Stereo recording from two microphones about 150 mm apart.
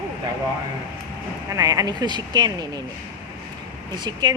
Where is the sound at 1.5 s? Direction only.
25° right (ahead or behind).